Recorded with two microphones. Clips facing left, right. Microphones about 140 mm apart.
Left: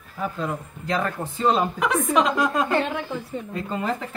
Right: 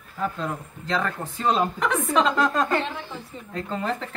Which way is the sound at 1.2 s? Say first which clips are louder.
Left 3 dB; centre (ahead or behind).